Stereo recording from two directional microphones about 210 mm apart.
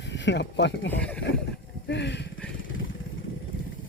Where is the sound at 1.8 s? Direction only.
55° left (ahead or behind).